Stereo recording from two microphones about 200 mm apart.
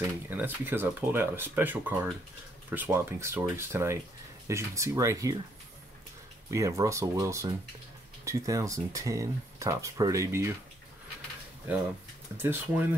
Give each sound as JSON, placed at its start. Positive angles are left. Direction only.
{"t": 0.0, "sound": "speech", "side_deg": -10}
{"t": 6.5, "sound": "speech", "side_deg": -15}
{"t": 12.4, "sound": "speech", "side_deg": -10}